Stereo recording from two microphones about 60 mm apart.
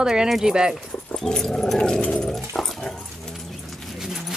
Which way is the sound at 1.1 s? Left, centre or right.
Centre.